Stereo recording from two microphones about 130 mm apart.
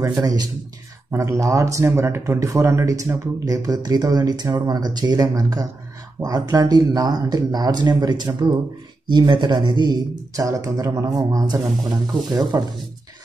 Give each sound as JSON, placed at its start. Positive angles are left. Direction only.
{"t": 0.2, "sound": "speech", "side_deg": -30}